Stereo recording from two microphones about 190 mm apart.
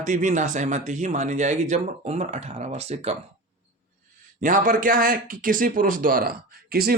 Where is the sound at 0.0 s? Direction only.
40° right (ahead or behind).